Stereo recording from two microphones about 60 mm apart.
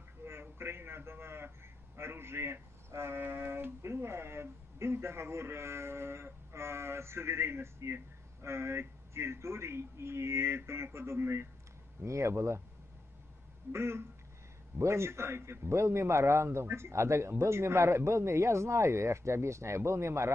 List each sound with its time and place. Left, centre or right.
0.2 s a sound: right
2.0 s speech: right
13.7 s speech: right